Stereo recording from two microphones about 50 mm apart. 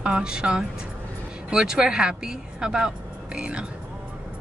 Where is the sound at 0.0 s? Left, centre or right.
Centre.